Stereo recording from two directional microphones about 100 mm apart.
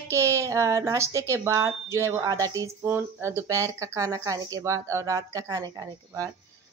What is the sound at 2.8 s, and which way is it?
Speech, 20° right (ahead or behind).